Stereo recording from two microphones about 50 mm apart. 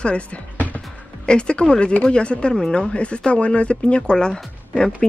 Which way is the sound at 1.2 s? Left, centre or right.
Centre.